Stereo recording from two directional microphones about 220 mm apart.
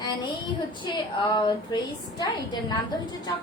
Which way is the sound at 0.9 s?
20° left (ahead or behind).